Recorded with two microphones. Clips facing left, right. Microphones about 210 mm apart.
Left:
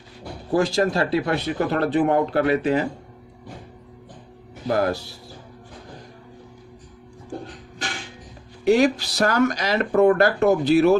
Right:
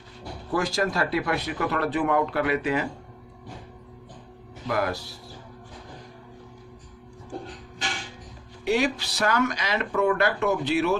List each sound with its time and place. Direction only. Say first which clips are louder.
0.5 s speech: left 6 dB; 30° left (ahead or behind)
4.6 s speech: left 5 dB; 35° left (ahead or behind)
8.6 s speech: left 7 dB; 45° left (ahead or behind)